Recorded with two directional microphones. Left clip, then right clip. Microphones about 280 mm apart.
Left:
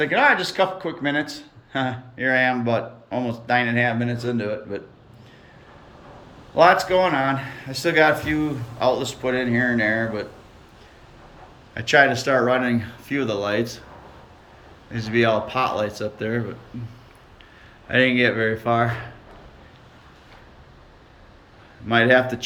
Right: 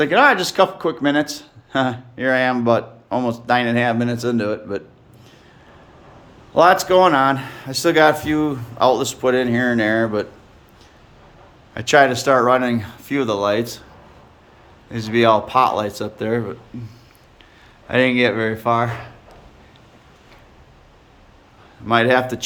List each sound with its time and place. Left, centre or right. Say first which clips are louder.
0.0 s speech: right 4 dB; right
6.6 s speech: right 3 dB; right
11.7 s speech: right 3 dB; centre
14.8 s speech: right 5 dB; centre
17.8 s speech: right 2 dB; centre
21.8 s speech: right 1 dB; centre